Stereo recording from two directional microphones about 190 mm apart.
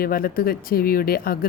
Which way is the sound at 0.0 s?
50° left (ahead or behind).